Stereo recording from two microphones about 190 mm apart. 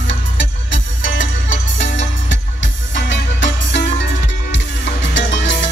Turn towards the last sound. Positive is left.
turn(degrees=70)  # may be behind; listen again after turning